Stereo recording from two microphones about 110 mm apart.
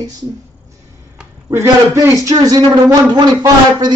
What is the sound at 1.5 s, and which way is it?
Speech, 25° right (ahead or behind).